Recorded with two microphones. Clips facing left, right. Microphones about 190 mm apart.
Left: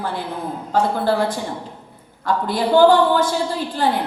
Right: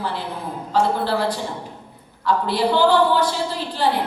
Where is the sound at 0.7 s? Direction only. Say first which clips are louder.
Left 1 dB; 50° left (ahead or behind).